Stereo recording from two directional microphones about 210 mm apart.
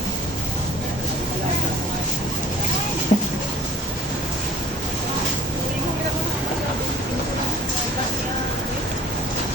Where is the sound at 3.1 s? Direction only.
30° left (ahead or behind).